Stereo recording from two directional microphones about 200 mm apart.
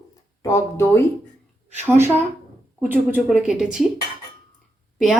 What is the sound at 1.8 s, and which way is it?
Speech, 10° right (ahead or behind).